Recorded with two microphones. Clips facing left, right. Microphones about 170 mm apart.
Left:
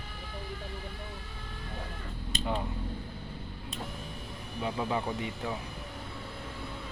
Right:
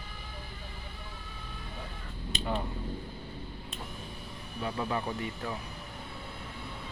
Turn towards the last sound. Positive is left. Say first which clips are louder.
# left 1 dB
turn(degrees=15)  # may be behind; listen again after turning